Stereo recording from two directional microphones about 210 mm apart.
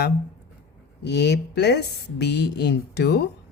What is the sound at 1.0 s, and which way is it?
A woman's voice, 55° left (ahead or behind).